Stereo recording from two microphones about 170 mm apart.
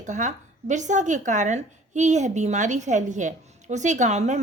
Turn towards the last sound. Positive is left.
turn(degrees=-40)  # may be behind; listen again after turning